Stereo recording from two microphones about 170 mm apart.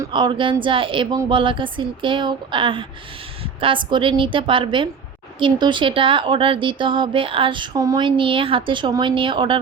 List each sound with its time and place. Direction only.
0.0 s speech: 30° right (ahead or behind)